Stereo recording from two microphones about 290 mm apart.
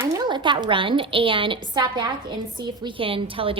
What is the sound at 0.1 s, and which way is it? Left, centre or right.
A woman's voice, centre.